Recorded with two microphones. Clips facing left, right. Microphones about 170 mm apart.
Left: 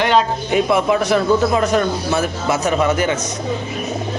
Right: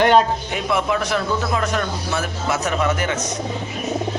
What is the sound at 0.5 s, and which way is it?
A man's voice, 10° left (ahead or behind).